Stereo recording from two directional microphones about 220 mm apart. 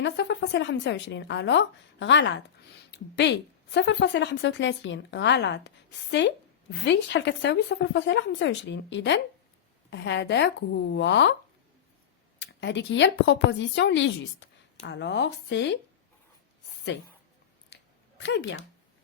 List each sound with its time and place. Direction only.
0.0 s a woman's voice: 55° left (ahead or behind)
12.4 s a woman's voice: 55° left (ahead or behind)
17.7 s a sound: 50° left (ahead or behind)
18.2 s a woman's voice: 55° left (ahead or behind)